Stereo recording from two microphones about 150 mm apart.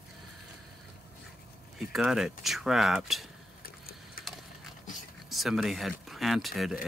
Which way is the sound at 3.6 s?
80° left.